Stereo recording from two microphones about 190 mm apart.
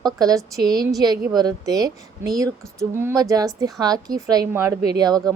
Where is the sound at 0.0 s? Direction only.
20° right (ahead or behind).